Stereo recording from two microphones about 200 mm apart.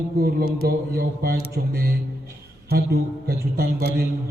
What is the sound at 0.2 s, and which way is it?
A man's voice, 50° right (ahead or behind).